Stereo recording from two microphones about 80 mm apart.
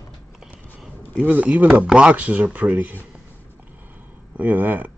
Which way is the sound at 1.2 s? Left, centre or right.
Centre.